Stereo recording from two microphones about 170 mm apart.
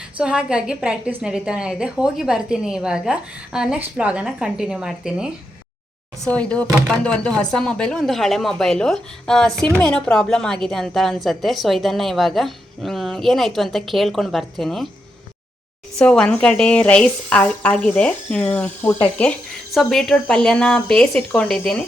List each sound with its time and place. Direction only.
0.2 s a woman's voice: 5° right (ahead or behind)
6.7 s speech: 10° right (ahead or behind)
7.0 s a woman's voice: 5° left (ahead or behind)
16.0 s a woman's voice: 5° left (ahead or behind)